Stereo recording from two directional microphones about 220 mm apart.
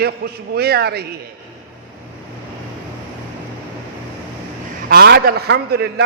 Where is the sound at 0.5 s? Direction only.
45° right (ahead or behind).